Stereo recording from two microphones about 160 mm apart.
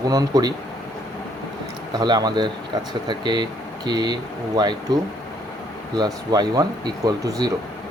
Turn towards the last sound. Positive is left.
turn(degrees=-25)  # may be behind; listen again after turning